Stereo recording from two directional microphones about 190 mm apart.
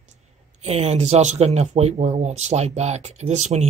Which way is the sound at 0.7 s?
35° right (ahead or behind).